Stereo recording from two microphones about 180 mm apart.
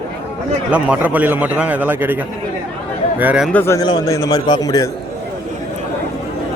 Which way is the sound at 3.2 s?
10° right (ahead or behind).